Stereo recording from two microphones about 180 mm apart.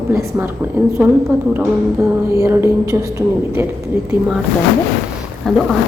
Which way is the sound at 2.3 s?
15° right (ahead or behind).